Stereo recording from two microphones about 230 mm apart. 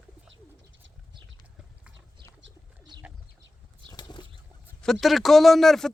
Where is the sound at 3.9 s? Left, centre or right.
Centre.